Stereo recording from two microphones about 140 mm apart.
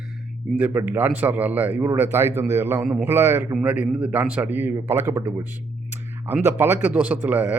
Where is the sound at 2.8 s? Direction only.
5° right (ahead or behind).